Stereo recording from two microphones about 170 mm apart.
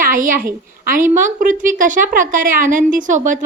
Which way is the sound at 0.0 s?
55° right (ahead or behind).